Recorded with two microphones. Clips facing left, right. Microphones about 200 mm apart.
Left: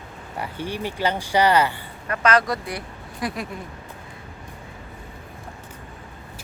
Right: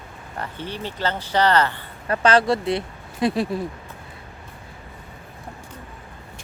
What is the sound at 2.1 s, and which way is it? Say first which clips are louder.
Speech: right 3 dB; 30° right (ahead or behind).